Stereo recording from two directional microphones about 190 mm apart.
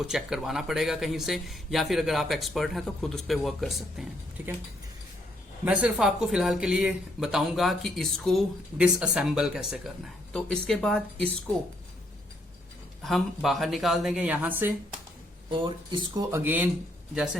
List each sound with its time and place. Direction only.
0.0 s speech: 5° right (ahead or behind)
5.6 s speech: 5° right (ahead or behind)
13.0 s speech: centre (ahead or behind)
15.4 s speech: 25° right (ahead or behind); by 16.6 s 10° right (ahead or behind)